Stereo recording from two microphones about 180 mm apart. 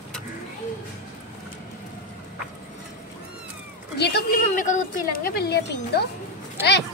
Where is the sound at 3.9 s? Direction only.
65° left (ahead or behind).